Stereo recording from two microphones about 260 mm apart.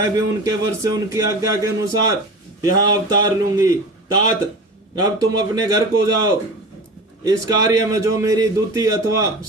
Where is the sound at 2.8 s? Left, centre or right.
Centre.